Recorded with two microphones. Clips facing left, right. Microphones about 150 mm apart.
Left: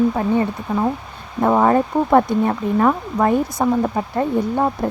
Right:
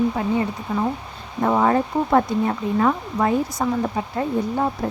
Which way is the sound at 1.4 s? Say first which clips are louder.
Left 3 dB; 55° left (ahead or behind).